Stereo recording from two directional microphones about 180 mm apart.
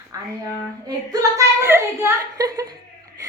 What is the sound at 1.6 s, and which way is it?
A woman's voice, 15° right (ahead or behind).